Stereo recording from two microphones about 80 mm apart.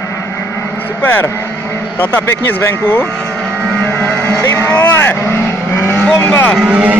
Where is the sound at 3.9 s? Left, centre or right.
Left.